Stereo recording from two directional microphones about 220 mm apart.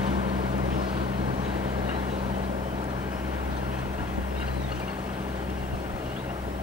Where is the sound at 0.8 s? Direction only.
25° right (ahead or behind).